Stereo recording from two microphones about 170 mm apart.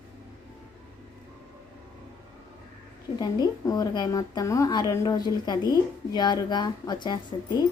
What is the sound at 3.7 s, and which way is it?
Speech, 20° left (ahead or behind).